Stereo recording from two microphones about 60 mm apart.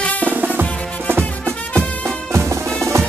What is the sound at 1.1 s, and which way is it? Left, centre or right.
Music, right.